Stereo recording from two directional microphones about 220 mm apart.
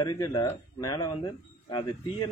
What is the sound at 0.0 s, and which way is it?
Speech, 20° left (ahead or behind).